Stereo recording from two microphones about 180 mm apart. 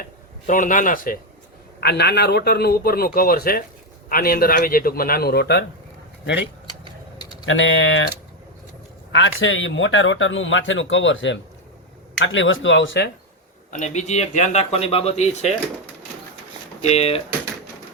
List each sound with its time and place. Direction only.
0.4 s speech: 45° left (ahead or behind)
1.8 s a man's voice: 65° left (ahead or behind)
7.4 s a man's voice: 90° left
9.1 s a man's voice: 90° left
13.7 s speech: 40° left (ahead or behind)
16.8 s speech: 35° left (ahead or behind)